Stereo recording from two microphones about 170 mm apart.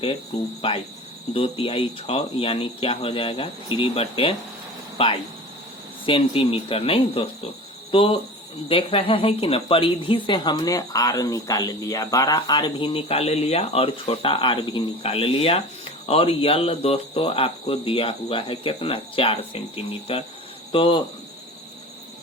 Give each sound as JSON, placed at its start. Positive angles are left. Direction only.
{"t": 0.6, "sound": "speech", "side_deg": 30}